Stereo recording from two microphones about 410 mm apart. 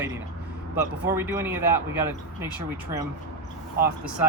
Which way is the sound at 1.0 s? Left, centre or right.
Centre.